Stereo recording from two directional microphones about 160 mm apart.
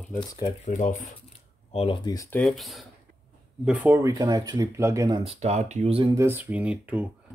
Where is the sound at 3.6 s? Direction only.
10° right (ahead or behind).